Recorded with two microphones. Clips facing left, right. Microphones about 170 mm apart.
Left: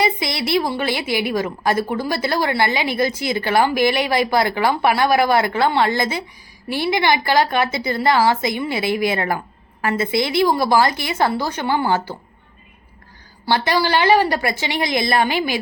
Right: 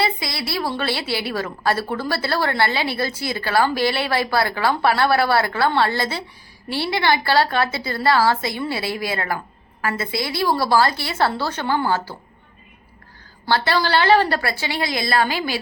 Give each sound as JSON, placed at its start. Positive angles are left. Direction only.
{"t": 0.0, "sound": "a sound", "side_deg": 20}
{"t": 0.7, "sound": "a woman's voice", "side_deg": 15}
{"t": 13.5, "sound": "a woman's voice", "side_deg": 15}